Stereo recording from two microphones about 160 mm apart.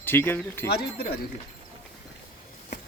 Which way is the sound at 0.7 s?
80° left.